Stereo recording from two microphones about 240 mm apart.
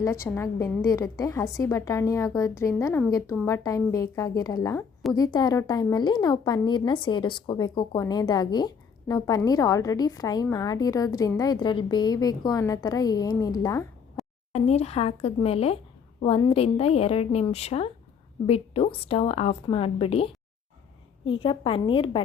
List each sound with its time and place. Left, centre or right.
0.0 s a woman's voice: centre
14.2 s a sound: centre
14.5 s a woman's voice: left